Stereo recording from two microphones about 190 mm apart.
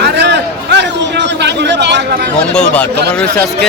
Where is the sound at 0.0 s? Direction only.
65° right (ahead or behind).